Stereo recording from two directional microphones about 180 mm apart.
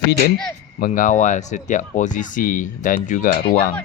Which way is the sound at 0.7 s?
50° left (ahead or behind).